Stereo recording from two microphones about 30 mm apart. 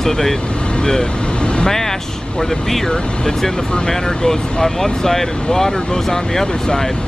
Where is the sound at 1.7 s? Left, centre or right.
Centre.